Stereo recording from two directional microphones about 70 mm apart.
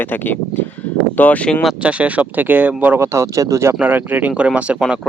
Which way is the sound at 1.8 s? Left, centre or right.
Centre.